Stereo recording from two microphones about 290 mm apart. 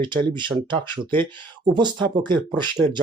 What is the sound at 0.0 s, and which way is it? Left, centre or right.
Speech, centre.